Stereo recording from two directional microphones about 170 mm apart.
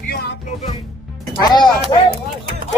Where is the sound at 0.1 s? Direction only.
70° left (ahead or behind).